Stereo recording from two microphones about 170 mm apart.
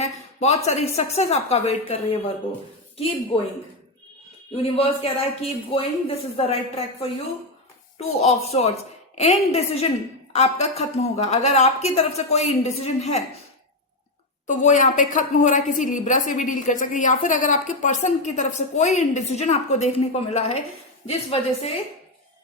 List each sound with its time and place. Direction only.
0.0 s a woman's voice: 40° left (ahead or behind)
4.5 s a woman's voice: 35° left (ahead or behind)
14.4 s a woman's voice: 45° left (ahead or behind)